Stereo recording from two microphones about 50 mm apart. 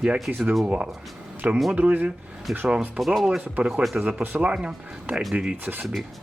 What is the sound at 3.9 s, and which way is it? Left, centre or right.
Speech, right.